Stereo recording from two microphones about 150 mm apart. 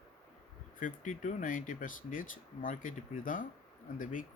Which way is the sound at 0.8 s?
60° left (ahead or behind).